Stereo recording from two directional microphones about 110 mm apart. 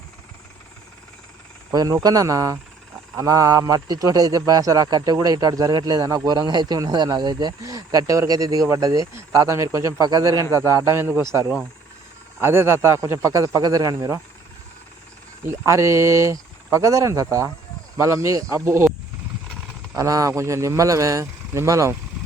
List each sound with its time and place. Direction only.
1.7 s a man's voice: 35° right (ahead or behind)
15.4 s speech: 25° right (ahead or behind)
20.0 s speech: 30° right (ahead or behind)